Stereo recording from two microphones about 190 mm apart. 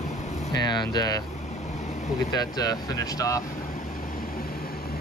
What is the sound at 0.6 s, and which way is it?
Speech, 25° left (ahead or behind).